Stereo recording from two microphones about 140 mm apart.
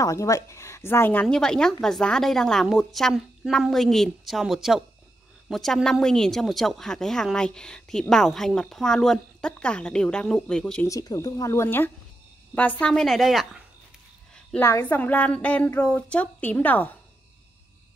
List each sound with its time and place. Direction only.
0.0 s speech: 25° left (ahead or behind)
1.2 s speech: 5° left (ahead or behind)
10.9 s speech: 25° left (ahead or behind)
12.8 s speech: 5° left (ahead or behind)
14.5 s a woman's voice: 15° left (ahead or behind)